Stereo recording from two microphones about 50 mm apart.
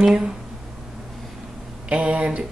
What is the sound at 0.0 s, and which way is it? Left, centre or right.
Speech, centre.